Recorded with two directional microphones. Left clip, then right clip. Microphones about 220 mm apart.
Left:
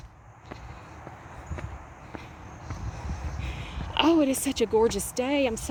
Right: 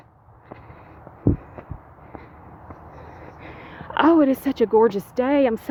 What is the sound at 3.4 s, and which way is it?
Speech, 25° right (ahead or behind).